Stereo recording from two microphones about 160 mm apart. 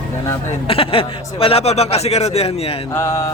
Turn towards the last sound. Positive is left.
turn(degrees=15)  # may be behind; listen again after turning